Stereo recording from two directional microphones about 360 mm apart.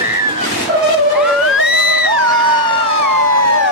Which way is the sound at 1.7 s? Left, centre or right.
Left.